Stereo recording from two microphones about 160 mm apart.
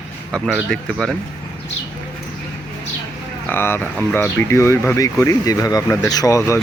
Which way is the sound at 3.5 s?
15° left (ahead or behind).